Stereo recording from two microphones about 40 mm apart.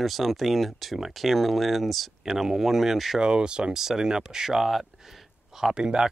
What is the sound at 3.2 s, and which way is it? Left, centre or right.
Speech, right.